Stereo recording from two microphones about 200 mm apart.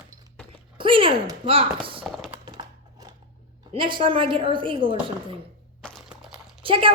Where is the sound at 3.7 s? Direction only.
25° right (ahead or behind).